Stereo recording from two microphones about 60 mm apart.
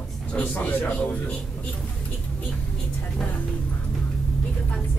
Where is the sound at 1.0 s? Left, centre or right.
Left.